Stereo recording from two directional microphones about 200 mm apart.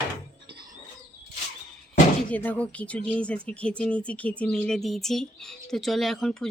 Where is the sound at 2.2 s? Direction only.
10° left (ahead or behind).